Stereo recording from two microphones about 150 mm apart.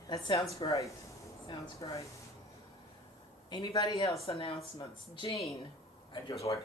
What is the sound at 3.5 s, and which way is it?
Speech, 25° left (ahead or behind).